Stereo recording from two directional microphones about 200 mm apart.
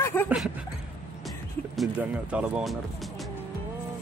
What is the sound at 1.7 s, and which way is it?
Speech, 5° right (ahead or behind).